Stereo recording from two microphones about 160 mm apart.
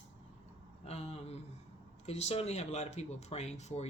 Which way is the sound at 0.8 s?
40° left (ahead or behind).